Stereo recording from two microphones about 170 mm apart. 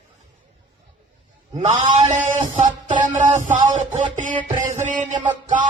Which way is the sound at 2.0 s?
50° right (ahead or behind).